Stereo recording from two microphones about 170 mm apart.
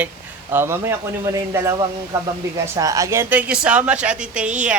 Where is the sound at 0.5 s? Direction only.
15° right (ahead or behind).